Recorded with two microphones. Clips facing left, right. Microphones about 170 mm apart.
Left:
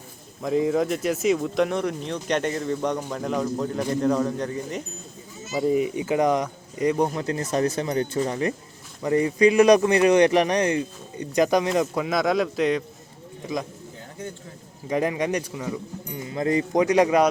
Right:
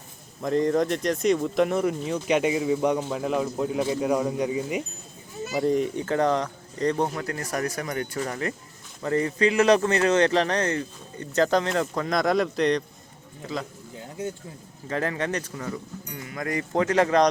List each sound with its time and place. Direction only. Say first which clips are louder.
0.4 s speech: even; 5° left (ahead or behind)
5.5 s speech: left 1 dB; 5° left (ahead or behind)
7.2 s speech: left 5 dB; 20° left (ahead or behind); by 12.8 s centre (ahead or behind)
13.4 s speech: left 3 dB; 15° left (ahead or behind)
14.8 s speech: left 4 dB; 15° left (ahead or behind)